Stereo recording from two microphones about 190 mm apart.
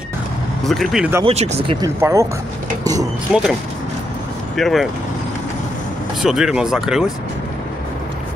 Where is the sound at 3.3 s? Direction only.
Centre (ahead or behind).